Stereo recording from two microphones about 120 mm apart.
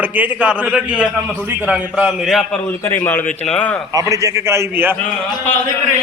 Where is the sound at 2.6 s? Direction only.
15° left (ahead or behind).